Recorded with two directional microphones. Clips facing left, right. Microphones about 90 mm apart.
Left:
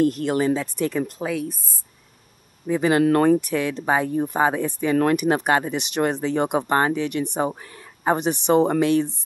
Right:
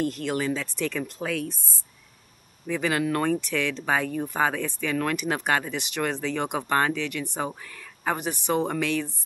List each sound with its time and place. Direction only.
0.2 s speech: 20° left (ahead or behind)
2.6 s speech: 20° left (ahead or behind)
3.0 s speech: 45° left (ahead or behind)
3.3 s speech: 15° left (ahead or behind)